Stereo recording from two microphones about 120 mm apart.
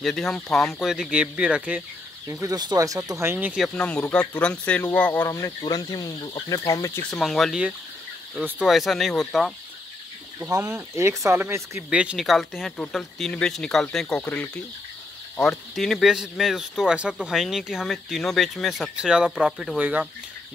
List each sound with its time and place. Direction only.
0.0 s speech: 5° left (ahead or behind)
2.4 s speech: 35° right (ahead or behind); by 3.5 s 20° right (ahead or behind)
3.5 s speech: 5° left (ahead or behind)
5.6 s speech: 35° left (ahead or behind)
7.0 s speech: 5° left (ahead or behind)
8.4 s speech: 10° right (ahead or behind)
10.4 s speech: 25° right (ahead or behind)
11.9 s speech: 10° right (ahead or behind); by 14.6 s 15° left (ahead or behind)
15.7 s speech: centre (ahead or behind)
19.8 s speech: 15° right (ahead or behind)